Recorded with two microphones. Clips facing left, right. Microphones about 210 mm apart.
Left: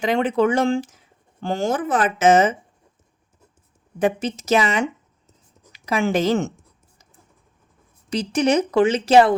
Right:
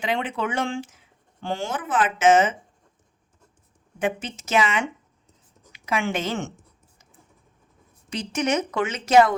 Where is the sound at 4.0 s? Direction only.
40° left (ahead or behind).